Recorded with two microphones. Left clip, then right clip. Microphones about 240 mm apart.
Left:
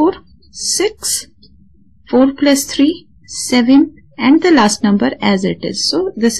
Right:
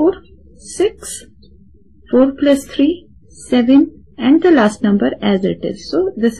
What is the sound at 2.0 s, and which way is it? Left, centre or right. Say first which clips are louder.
A woman's voice: even; left.